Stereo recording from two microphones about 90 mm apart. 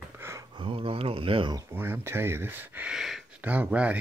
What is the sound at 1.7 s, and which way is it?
Speech, 25° right (ahead or behind).